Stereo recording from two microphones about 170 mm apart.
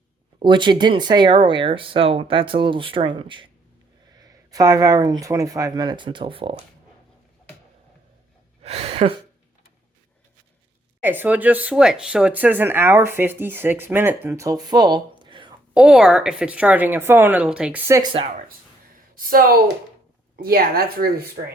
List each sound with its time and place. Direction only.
0.3 s speech: 30° right (ahead or behind)
8.6 s speech: 35° right (ahead or behind)
11.0 s speech: 10° right (ahead or behind); by 15.5 s 30° right (ahead or behind)
15.7 s speech: 5° right (ahead or behind)
19.1 s speech: 60° right (ahead or behind)